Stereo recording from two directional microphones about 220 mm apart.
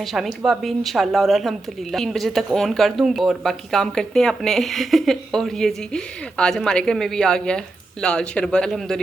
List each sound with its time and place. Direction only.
0.0 s speech: centre (ahead or behind)